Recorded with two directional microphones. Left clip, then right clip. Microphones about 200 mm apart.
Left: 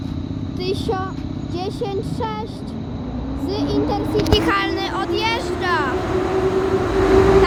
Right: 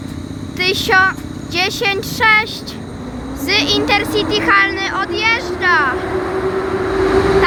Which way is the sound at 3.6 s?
15° left (ahead or behind).